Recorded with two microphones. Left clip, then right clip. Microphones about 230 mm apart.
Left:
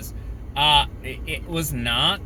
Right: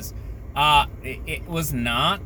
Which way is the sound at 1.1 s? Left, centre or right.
Centre.